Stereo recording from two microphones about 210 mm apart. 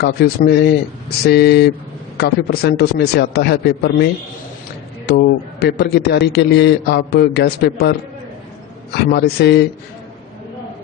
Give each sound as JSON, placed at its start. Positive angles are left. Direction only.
{"t": 0.0, "sound": "a man's voice", "side_deg": 50}
{"t": 9.1, "sound": "a man's voice", "side_deg": 50}